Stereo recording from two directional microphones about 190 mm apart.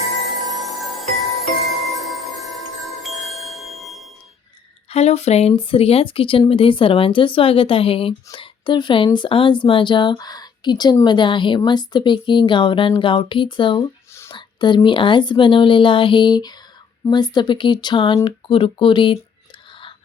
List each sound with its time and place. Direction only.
0.4 s music: centre (ahead or behind)
3.0 s chime: centre (ahead or behind)
4.9 s speech: 35° left (ahead or behind)